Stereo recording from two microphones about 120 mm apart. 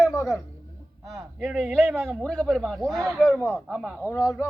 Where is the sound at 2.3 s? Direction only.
5° left (ahead or behind).